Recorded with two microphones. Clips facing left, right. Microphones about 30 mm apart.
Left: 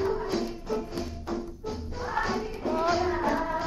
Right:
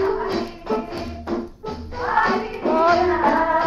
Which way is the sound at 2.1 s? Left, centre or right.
Right.